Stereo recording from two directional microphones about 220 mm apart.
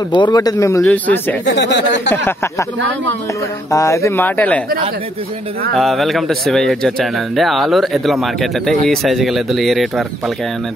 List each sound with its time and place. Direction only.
0.1 s speech: 20° left (ahead or behind)
1.6 s speech: 55° left (ahead or behind)
3.7 s speech: 15° left (ahead or behind)
5.8 s speech: centre (ahead or behind)